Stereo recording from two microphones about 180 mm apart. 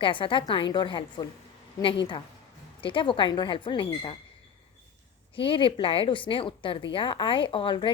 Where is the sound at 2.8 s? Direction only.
30° left (ahead or behind).